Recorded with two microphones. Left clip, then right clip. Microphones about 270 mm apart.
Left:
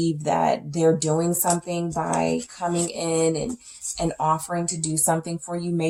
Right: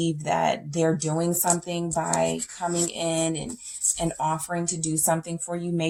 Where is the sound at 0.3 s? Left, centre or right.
Right.